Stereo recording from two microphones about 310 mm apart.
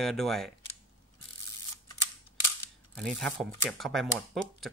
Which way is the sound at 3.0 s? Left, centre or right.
Centre.